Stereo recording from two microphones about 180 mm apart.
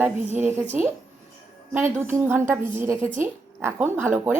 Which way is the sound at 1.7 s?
10° right (ahead or behind).